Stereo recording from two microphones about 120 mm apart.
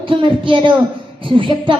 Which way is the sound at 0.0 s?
45° right (ahead or behind).